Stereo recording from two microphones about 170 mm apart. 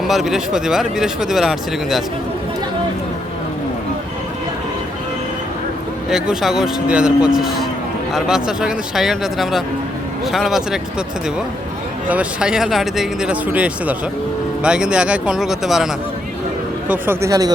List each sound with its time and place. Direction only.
0.0 s speech: centre (ahead or behind)
6.1 s speech: 5° right (ahead or behind)
12.0 s speech: 5° right (ahead or behind)
16.9 s speech: 15° right (ahead or behind)